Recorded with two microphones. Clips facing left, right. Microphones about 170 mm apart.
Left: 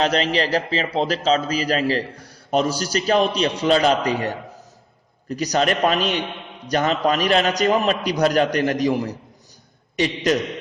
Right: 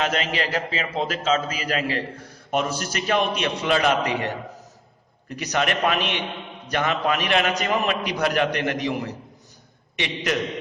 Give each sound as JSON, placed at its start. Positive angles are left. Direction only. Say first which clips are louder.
{"t": 0.0, "sound": "a man's voice", "louder": "left 5 dB", "side_deg": 35}